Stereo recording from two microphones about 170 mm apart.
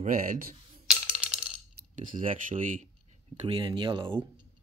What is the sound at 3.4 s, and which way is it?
Speech, 30° right (ahead or behind).